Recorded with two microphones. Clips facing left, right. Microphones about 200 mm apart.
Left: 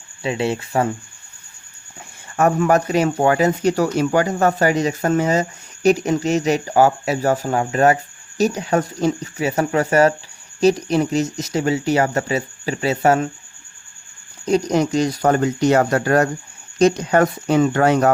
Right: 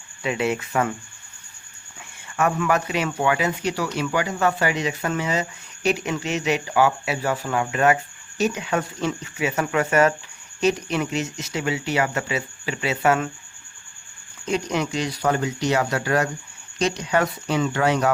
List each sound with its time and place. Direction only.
0.2 s speech: 30° left (ahead or behind)
2.3 s speech: 40° left (ahead or behind)
14.4 s speech: 40° left (ahead or behind)